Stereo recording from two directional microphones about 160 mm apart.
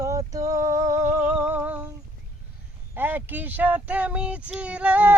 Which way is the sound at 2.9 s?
10° right (ahead or behind).